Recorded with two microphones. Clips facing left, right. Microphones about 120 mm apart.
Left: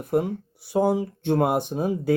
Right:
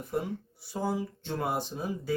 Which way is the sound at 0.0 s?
55° left (ahead or behind).